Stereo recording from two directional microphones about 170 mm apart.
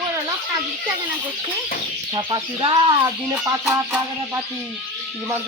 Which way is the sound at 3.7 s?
15° right (ahead or behind).